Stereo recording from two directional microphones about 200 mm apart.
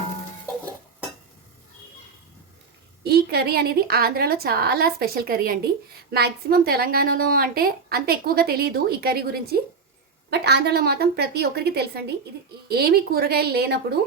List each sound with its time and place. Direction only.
3.0 s a woman's voice: 55° right (ahead or behind)